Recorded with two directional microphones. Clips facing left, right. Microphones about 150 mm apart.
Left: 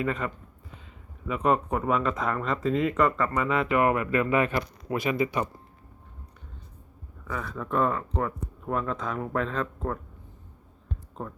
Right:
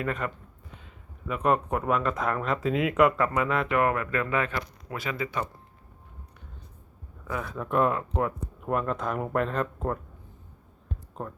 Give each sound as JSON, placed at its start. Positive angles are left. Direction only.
{"t": 0.0, "sound": "speech", "side_deg": 0}
{"t": 1.3, "sound": "speech", "side_deg": 0}
{"t": 7.3, "sound": "speech", "side_deg": -5}
{"t": 11.1, "sound": "speech", "side_deg": -5}